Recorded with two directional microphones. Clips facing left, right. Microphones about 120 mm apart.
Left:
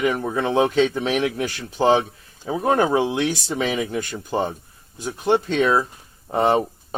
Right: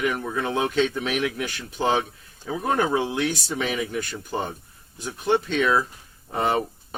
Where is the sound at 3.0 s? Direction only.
20° left (ahead or behind).